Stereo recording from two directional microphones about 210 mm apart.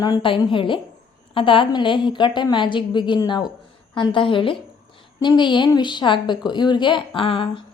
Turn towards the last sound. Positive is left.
turn(degrees=25)  # may be behind; listen again after turning